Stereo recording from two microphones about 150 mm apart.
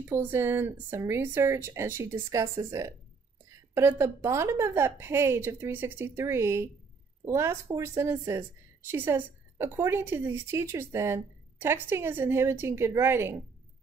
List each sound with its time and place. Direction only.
0.0 s a woman's voice: 15° right (ahead or behind)